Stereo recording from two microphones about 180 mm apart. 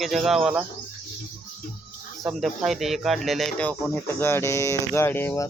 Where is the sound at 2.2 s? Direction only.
Centre (ahead or behind); by 5.5 s 15° left (ahead or behind).